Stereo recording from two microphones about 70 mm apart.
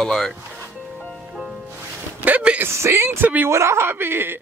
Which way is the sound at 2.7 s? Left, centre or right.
Right.